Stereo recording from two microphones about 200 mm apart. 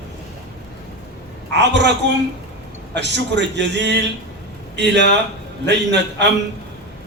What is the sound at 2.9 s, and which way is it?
A man's voice, 60° right (ahead or behind).